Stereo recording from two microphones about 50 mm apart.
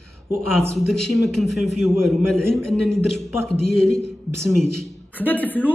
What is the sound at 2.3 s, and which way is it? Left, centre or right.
A man's voice, centre.